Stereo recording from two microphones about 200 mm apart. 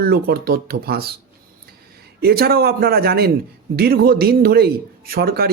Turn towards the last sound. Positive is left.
turn(degrees=-50)  # may be behind; listen again after turning